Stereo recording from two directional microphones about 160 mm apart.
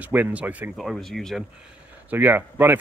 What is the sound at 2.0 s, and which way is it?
Speech, 10° right (ahead or behind).